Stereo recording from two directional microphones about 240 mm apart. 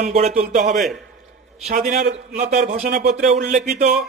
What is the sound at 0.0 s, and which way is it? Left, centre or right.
A man's voice, right.